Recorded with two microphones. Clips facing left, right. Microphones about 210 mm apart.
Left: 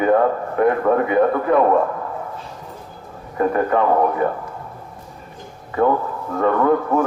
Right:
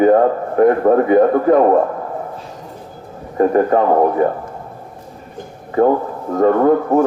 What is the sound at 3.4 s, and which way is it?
Speech, 35° right (ahead or behind).